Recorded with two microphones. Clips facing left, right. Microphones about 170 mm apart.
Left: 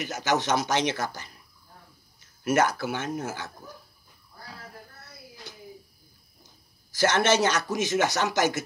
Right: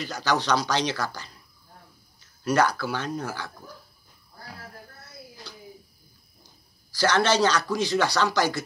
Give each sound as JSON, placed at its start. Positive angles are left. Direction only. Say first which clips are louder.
{"t": 0.0, "sound": "speech", "louder": "even", "side_deg": 20}
{"t": 2.4, "sound": "speech", "louder": "right 1 dB", "side_deg": 20}
{"t": 6.9, "sound": "speech", "louder": "even", "side_deg": 20}